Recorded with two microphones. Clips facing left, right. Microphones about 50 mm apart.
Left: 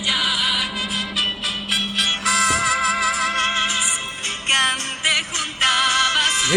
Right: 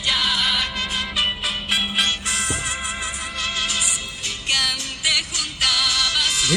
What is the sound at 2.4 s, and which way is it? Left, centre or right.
Music, left.